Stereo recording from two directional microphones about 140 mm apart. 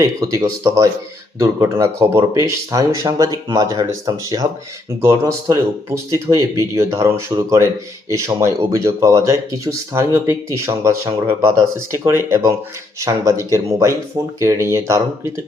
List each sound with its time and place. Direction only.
0.0 s speech: 25° right (ahead or behind)